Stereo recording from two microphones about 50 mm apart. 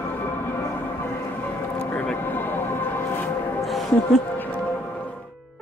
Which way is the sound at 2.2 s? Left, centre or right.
Left.